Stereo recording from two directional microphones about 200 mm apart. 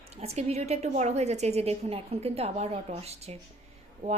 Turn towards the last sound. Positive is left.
turn(degrees=-30)  # may be behind; listen again after turning